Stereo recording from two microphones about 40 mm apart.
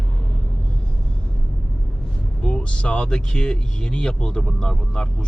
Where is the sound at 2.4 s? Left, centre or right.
Left.